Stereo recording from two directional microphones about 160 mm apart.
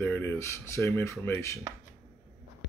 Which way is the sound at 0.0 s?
15° left (ahead or behind).